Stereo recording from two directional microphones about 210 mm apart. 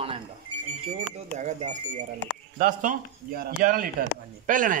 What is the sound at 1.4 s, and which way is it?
Speech, 35° right (ahead or behind).